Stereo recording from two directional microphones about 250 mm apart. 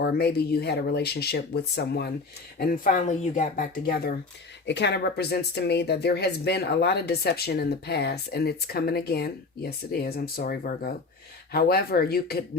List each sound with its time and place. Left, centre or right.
0.0 s speech: left